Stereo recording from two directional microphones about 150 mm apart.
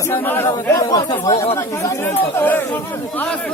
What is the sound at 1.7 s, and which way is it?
Speech, 15° left (ahead or behind).